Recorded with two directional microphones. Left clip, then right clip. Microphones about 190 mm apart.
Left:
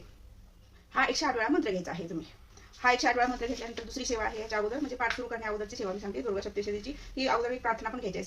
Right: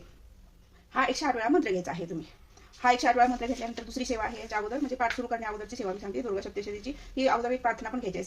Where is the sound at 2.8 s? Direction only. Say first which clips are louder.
Right 3 dB; 30° right (ahead or behind).